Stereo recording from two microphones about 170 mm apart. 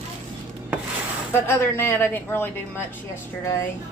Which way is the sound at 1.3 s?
15° left (ahead or behind).